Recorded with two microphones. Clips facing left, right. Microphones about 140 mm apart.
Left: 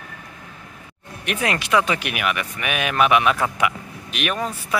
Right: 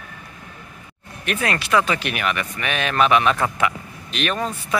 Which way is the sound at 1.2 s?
15° left (ahead or behind).